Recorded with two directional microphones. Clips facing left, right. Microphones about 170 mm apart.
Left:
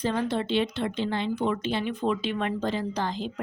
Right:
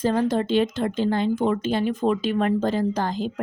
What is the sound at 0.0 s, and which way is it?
A woman's voice, 45° right (ahead or behind).